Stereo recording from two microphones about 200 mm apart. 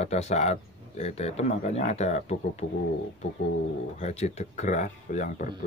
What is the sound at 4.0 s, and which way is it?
A man's voice, 35° left (ahead or behind).